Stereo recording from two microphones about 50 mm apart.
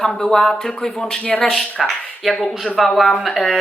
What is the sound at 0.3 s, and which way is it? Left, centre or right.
Speech, centre.